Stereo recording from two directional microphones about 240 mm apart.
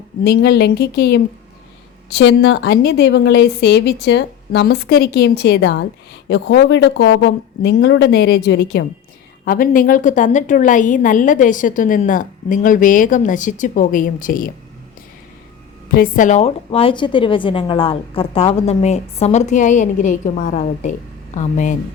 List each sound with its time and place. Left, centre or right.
0.3 s a woman's voice: left
16.0 s a woman's voice: left